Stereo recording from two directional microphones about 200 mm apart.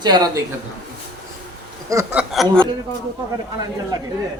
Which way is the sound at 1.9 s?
15° right (ahead or behind).